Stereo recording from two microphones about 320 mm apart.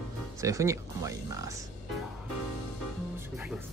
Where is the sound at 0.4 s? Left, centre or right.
Centre.